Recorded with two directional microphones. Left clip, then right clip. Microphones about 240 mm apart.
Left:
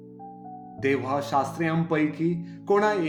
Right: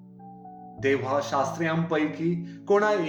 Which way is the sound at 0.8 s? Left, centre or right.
Left.